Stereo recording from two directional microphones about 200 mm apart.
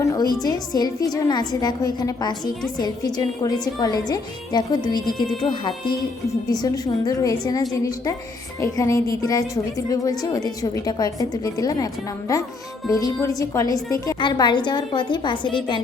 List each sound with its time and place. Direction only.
0.0 s a woman's voice: 20° left (ahead or behind)
12.9 s a woman's voice: 20° left (ahead or behind)